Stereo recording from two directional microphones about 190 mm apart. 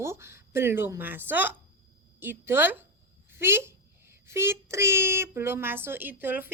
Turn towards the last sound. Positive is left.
turn(degrees=-10)  # may be behind; listen again after turning